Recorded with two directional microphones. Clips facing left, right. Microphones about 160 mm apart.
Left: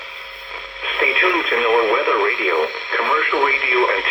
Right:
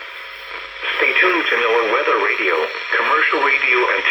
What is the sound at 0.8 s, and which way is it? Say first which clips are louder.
Speech: right 1 dB; 25° left (ahead or behind).